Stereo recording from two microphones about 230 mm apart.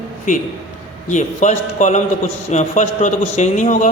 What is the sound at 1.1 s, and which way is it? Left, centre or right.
Speech, left.